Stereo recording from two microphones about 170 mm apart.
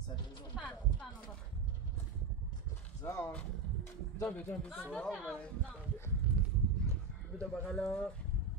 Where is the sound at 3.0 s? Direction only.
15° left (ahead or behind).